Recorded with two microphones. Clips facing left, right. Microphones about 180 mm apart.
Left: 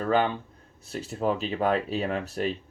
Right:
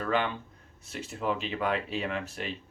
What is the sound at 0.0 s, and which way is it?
Speech, 35° left (ahead or behind).